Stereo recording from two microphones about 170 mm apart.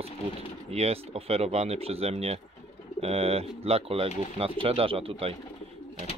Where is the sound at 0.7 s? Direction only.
40° right (ahead or behind).